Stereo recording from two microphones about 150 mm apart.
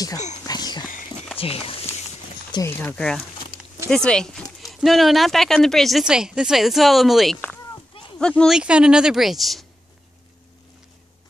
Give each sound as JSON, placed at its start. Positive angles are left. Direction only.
{"t": 0.4, "sound": "dog", "side_deg": 25}
{"t": 1.4, "sound": "speech", "side_deg": 40}
{"t": 2.5, "sound": "speech", "side_deg": 15}
{"t": 8.5, "sound": "speech", "side_deg": -5}